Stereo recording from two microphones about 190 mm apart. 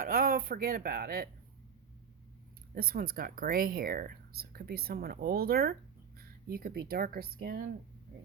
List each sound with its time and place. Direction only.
0.0 s speech: 45° right (ahead or behind)
2.7 s speech: 50° right (ahead or behind)